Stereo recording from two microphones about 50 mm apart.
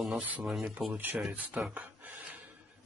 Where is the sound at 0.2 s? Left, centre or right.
Right.